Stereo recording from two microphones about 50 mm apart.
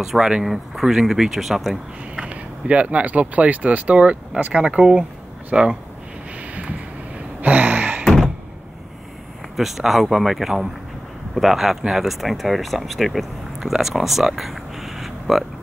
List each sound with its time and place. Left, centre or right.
0.0 s speech: centre
2.1 s speech: right
6.4 s vehicle: right
7.4 s gasp: right
9.6 s speech: centre